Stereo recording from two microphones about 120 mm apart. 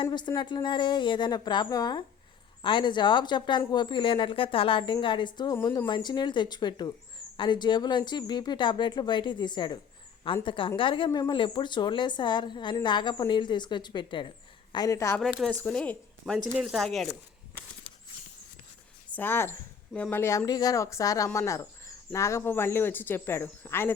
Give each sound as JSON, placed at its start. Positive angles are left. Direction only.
{"t": 0.0, "sound": "speech", "side_deg": 40}
{"t": 14.7, "sound": "speech", "side_deg": 30}
{"t": 15.2, "sound": "speech", "side_deg": 0}
{"t": 15.4, "sound": "speech", "side_deg": 10}
{"t": 19.1, "sound": "speech", "side_deg": 15}